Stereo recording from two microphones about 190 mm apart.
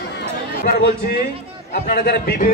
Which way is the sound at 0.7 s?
50° left (ahead or behind).